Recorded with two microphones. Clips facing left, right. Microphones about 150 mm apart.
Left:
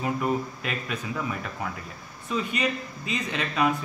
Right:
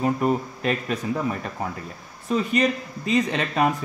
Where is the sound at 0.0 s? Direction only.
40° right (ahead or behind).